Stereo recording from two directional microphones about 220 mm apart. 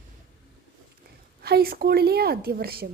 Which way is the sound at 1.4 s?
45° right (ahead or behind).